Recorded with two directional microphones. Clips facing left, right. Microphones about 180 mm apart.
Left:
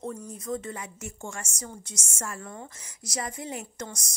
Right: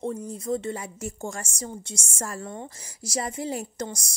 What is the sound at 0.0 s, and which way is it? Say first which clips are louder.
A woman's voice: right 5 dB; 30° right (ahead or behind).